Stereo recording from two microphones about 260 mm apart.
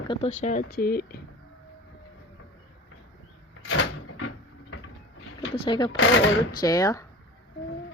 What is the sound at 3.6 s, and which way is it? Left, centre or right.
Door, left.